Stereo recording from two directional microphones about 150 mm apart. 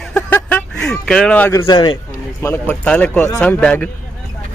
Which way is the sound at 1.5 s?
25° left (ahead or behind).